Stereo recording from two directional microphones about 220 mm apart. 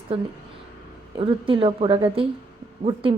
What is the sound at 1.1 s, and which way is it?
Speech, 25° right (ahead or behind).